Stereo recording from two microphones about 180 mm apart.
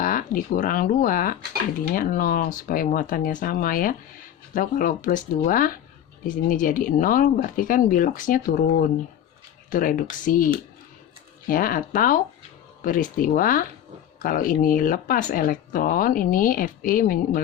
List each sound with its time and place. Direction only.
0.0 s speech: 50° left (ahead or behind)